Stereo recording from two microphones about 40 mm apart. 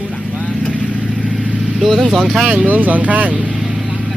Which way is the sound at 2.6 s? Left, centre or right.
Right.